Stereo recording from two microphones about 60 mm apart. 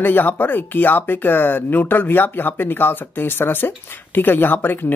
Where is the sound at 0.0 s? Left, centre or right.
Left.